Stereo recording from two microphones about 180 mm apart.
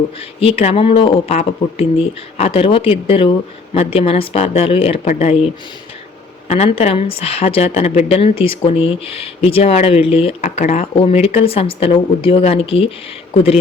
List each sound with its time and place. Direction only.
0.2 s speech: 30° left (ahead or behind)
6.5 s speech: 35° left (ahead or behind)